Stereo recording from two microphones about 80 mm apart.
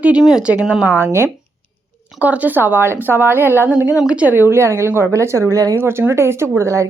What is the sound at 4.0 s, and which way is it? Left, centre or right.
Speech, centre.